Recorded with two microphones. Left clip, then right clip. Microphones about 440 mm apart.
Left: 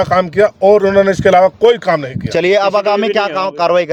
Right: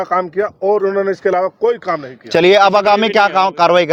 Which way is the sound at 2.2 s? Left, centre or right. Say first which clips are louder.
Right 3 dB; right.